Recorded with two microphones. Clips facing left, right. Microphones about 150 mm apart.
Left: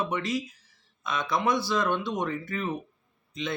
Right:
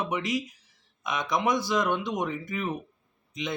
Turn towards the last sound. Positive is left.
turn(degrees=-15)  # may be behind; listen again after turning